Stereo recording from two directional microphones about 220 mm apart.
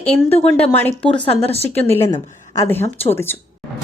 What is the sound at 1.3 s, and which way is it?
Speech, 25° left (ahead or behind).